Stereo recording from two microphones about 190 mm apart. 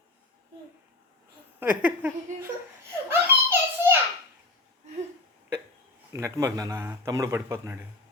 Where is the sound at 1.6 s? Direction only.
10° right (ahead or behind).